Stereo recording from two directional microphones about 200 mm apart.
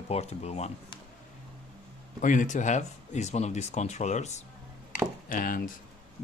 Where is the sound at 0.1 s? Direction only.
30° left (ahead or behind).